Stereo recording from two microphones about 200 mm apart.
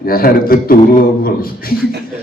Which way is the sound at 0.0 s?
45° left (ahead or behind).